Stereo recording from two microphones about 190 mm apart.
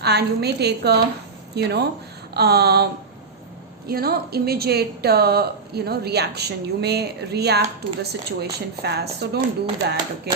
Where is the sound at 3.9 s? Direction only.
55° right (ahead or behind).